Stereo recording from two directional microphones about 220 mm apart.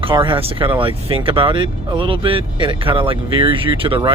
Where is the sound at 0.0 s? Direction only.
20° right (ahead or behind).